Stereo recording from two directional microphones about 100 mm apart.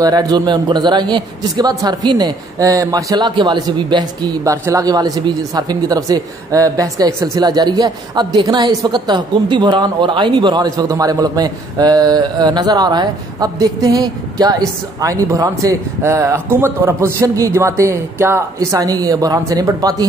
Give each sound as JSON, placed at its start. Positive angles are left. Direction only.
{"t": 0.0, "sound": "a woman's voice", "side_deg": -45}